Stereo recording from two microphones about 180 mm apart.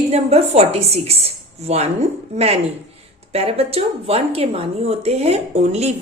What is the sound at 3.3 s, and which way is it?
Speech, 35° right (ahead or behind).